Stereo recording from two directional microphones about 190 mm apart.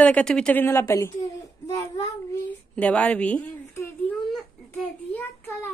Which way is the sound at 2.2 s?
10° left (ahead or behind).